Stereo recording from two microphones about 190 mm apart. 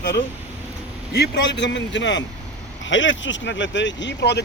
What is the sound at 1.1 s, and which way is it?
A man's voice, 60° left (ahead or behind).